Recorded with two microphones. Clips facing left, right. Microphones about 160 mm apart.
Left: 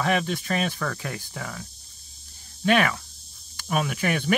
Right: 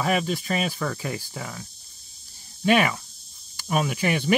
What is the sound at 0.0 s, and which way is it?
Speech, 5° right (ahead or behind).